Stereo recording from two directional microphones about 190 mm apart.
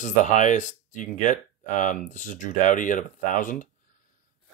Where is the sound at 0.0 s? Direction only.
40° left (ahead or behind).